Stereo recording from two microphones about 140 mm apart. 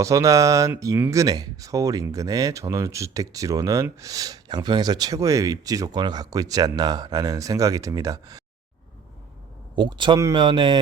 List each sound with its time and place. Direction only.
0.0 s speech: 25° right (ahead or behind)
9.7 s speech: 35° right (ahead or behind)